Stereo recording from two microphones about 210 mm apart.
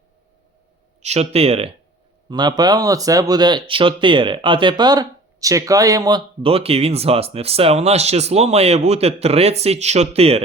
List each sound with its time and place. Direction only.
1.0 s speech: 30° right (ahead or behind)